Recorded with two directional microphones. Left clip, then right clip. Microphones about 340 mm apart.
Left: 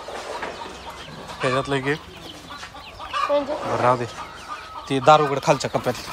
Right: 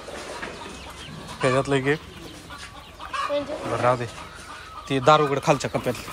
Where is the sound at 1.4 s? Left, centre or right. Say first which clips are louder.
Right 1 dB; centre.